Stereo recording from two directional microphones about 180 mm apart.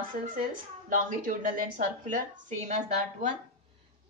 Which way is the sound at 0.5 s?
45° right (ahead or behind).